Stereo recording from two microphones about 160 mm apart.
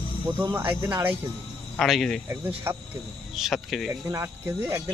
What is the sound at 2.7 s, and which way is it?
Speech, 15° right (ahead or behind).